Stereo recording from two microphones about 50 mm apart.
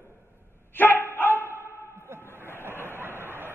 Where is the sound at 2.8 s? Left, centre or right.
Right.